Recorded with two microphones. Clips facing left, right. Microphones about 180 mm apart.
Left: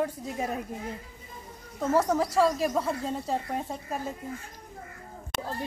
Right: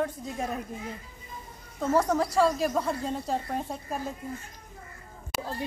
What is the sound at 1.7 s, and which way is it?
Speech, 5° left (ahead or behind).